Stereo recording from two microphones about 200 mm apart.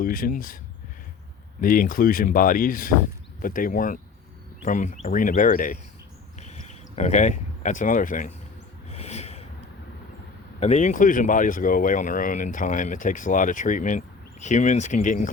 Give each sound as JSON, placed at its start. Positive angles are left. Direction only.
{"t": 0.0, "sound": "speech", "side_deg": 45}
{"t": 1.6, "sound": "speech", "side_deg": 45}
{"t": 6.4, "sound": "a sound", "side_deg": 35}
{"t": 10.6, "sound": "speech", "side_deg": 35}